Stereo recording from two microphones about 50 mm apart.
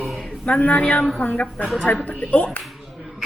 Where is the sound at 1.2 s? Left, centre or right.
Left.